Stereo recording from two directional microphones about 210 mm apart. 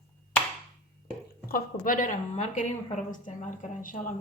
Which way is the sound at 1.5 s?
40° left (ahead or behind).